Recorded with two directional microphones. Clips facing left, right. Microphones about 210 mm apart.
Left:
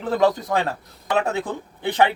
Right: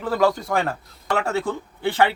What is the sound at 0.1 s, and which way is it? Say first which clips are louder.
Speech: left 1 dB; 20° left (ahead or behind).